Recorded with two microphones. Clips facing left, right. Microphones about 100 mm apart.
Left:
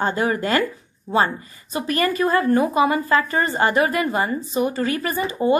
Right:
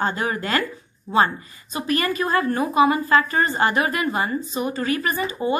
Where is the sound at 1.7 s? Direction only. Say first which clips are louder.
Left 2 dB; 40° left (ahead or behind).